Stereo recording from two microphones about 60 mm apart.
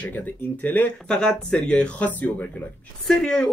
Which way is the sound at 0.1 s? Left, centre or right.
Left.